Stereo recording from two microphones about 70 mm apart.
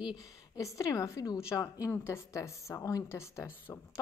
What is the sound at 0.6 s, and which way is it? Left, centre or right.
Speech, left.